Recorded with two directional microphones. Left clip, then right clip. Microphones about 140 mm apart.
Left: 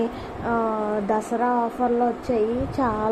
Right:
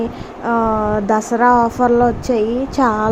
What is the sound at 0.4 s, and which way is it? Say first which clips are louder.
A woman's voice: right 8 dB; 20° right (ahead or behind).